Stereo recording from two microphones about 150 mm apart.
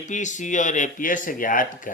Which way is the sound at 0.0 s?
55° left (ahead or behind).